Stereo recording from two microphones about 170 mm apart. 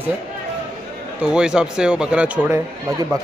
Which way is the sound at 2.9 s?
20° right (ahead or behind).